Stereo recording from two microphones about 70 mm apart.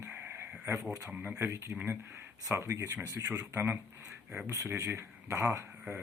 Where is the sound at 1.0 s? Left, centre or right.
Centre.